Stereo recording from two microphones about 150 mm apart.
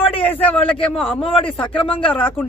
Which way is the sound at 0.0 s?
40° left (ahead or behind).